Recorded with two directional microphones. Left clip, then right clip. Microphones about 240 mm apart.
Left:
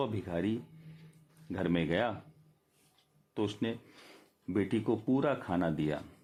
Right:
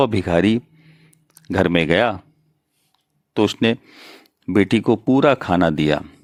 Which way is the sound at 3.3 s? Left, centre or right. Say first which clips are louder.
Right 17 dB; right.